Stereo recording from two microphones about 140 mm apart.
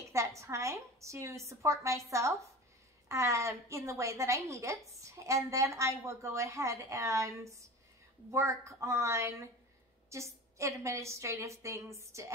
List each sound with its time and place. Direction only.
0.1 s a woman's voice: 20° right (ahead or behind)